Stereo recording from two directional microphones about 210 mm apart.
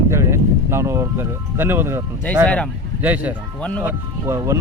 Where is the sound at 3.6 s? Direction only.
5° left (ahead or behind).